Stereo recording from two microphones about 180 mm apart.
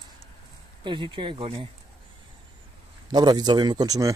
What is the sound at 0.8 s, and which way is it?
Speech, 25° right (ahead or behind).